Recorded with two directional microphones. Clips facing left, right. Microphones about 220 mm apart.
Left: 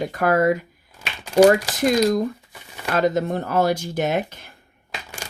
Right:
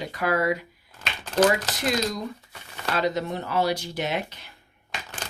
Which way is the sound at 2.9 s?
50° left (ahead or behind).